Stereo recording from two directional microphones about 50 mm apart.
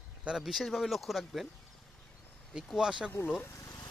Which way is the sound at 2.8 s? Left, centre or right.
Centre.